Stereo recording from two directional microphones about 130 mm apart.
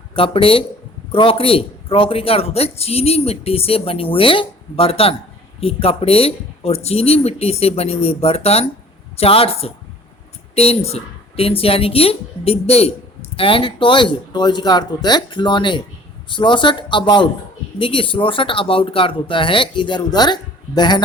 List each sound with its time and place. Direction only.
0.2 s speech: 45° left (ahead or behind)